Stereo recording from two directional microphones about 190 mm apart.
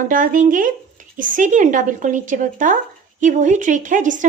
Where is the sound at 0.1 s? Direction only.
45° right (ahead or behind).